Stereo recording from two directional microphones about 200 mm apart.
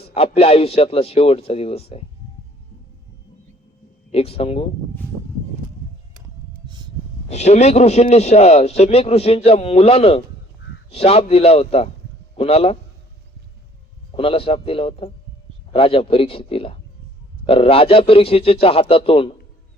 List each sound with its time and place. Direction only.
0.1 s a man's voice: 30° left (ahead or behind)
4.1 s a man's voice: 30° left (ahead or behind)
6.7 s a sound: 20° right (ahead or behind)
7.3 s a man's voice: 35° left (ahead or behind)
14.1 s a man's voice: 30° left (ahead or behind)